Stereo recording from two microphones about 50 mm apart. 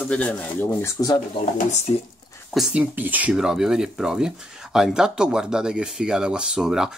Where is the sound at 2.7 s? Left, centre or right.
Right.